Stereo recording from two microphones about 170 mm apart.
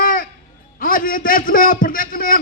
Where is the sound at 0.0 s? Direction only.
55° left (ahead or behind).